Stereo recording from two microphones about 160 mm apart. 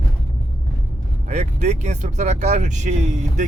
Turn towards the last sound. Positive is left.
turn(degrees=-50)  # may be behind; listen again after turning